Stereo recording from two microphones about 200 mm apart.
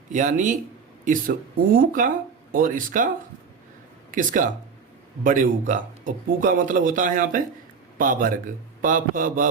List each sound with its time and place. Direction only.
0.1 s speech: 40° right (ahead or behind)
4.1 s speech: 40° right (ahead or behind)